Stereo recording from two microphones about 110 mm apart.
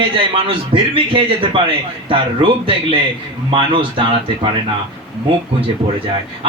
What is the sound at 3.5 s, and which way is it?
Speech, 50° right (ahead or behind).